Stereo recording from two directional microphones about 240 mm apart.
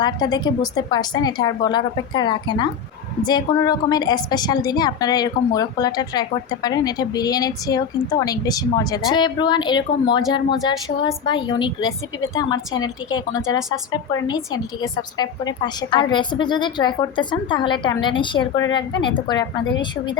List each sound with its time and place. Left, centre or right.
0.0 s a woman's voice: centre